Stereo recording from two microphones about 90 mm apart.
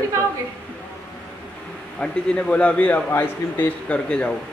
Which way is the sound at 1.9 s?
10° left (ahead or behind).